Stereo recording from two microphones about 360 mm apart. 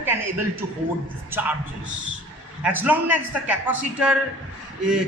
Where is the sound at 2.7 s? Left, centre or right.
Centre.